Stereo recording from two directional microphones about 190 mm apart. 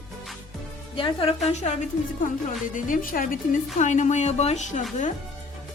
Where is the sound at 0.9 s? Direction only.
25° left (ahead or behind).